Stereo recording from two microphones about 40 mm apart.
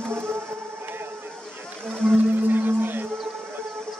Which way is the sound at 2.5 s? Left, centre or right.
Right.